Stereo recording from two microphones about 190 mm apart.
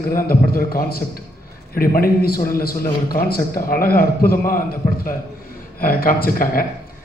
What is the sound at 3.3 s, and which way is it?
A man's voice, 50° left (ahead or behind).